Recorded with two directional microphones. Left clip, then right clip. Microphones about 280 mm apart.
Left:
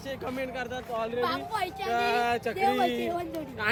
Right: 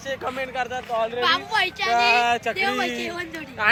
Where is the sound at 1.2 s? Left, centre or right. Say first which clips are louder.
Right 9 dB; centre.